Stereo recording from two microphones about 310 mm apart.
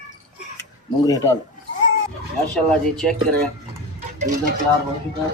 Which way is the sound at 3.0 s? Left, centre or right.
Centre.